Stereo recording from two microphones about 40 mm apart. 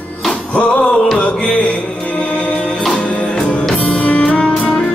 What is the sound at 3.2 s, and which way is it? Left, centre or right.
Music, left.